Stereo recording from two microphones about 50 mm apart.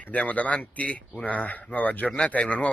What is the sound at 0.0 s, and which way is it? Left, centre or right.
A man's voice, left.